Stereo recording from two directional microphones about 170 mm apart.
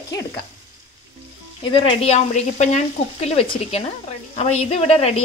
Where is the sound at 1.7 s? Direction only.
30° left (ahead or behind).